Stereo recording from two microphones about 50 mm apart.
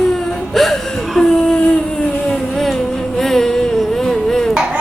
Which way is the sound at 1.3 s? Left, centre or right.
Centre.